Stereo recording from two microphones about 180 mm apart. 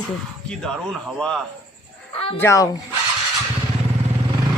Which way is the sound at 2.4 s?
15° left (ahead or behind).